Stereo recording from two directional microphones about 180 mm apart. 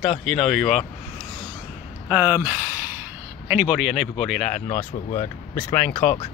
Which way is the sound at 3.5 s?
5° right (ahead or behind).